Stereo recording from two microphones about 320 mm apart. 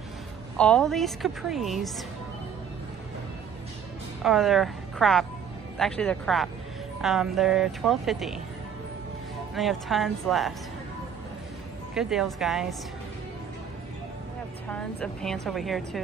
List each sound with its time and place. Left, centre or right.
0.6 s a woman's voice: centre
4.2 s a woman's voice: centre
9.6 s a woman's voice: centre
11.9 s a woman's voice: centre
14.7 s a woman's voice: centre